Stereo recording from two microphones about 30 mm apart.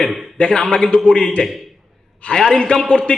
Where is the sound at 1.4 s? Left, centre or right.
Left.